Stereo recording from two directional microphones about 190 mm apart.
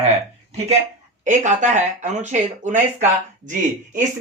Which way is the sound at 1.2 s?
40° right (ahead or behind).